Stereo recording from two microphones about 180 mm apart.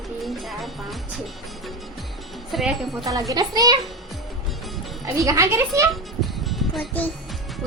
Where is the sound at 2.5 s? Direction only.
Centre (ahead or behind).